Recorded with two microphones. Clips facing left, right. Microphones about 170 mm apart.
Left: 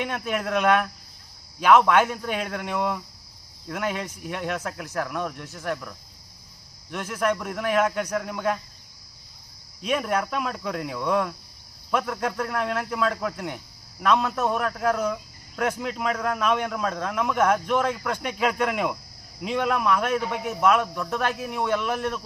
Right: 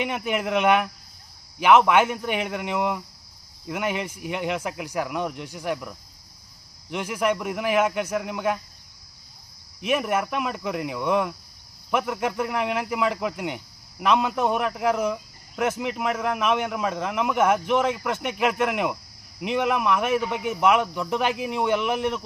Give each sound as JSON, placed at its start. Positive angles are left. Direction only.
{"t": 0.0, "sound": "speech", "side_deg": -10}
{"t": 9.8, "sound": "speech", "side_deg": -5}